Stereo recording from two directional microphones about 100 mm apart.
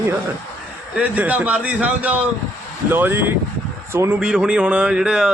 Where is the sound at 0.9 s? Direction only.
15° right (ahead or behind).